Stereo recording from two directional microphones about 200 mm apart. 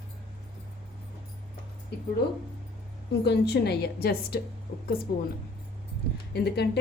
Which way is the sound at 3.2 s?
55° left (ahead or behind).